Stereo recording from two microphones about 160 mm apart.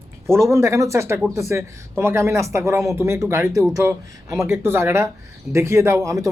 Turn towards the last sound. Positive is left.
turn(degrees=-20)  # may be behind; listen again after turning